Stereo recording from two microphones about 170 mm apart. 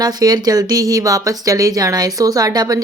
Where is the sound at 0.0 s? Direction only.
25° right (ahead or behind).